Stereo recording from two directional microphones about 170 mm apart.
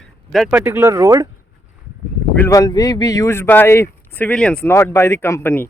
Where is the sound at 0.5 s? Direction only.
15° right (ahead or behind).